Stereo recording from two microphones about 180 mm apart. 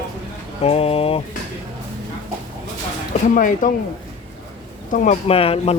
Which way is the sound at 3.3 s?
45° left (ahead or behind).